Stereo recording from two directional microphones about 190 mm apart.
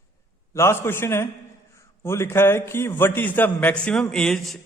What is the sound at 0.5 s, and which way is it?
A man's voice, 15° left (ahead or behind).